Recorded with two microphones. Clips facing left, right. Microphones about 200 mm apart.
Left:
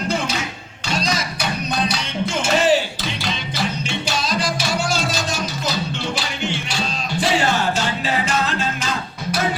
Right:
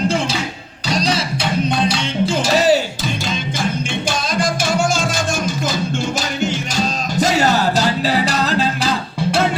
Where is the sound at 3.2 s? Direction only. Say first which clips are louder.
Right 2 dB; 50° right (ahead or behind).